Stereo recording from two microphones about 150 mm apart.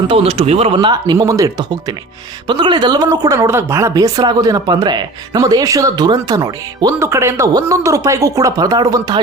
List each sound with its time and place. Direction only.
0.1 s a woman's voice: 40° right (ahead or behind)